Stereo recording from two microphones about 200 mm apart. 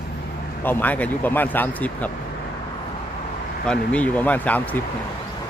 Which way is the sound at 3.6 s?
5° left (ahead or behind).